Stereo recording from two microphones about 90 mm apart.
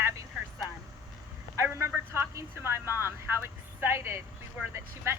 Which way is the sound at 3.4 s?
30° right (ahead or behind).